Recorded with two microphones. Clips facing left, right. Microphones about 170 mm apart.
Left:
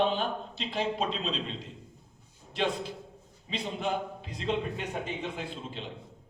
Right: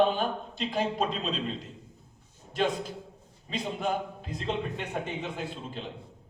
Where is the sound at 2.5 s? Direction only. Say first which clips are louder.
Right 2 dB; 45° right (ahead or behind).